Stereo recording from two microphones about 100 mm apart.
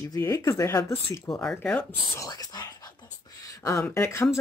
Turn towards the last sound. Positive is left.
turn(degrees=25)  # may be behind; listen again after turning